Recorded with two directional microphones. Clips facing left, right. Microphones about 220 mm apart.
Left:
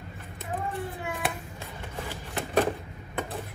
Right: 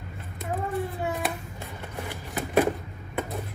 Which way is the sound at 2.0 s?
10° right (ahead or behind).